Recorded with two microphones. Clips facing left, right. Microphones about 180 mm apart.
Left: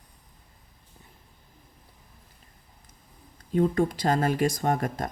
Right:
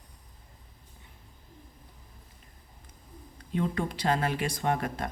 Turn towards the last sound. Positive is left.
turn(degrees=40)  # may be behind; listen again after turning